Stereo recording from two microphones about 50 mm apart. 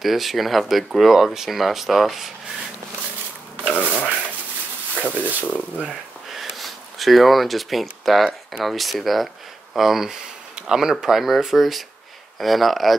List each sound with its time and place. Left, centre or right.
0.0 s speech: centre
3.6 s speech: left
6.5 s speech: centre